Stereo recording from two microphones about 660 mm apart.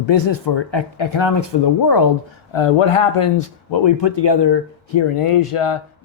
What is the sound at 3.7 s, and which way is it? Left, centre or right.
Speech, left.